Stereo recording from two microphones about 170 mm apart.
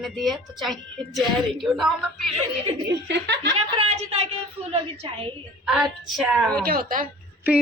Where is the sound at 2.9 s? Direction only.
85° right.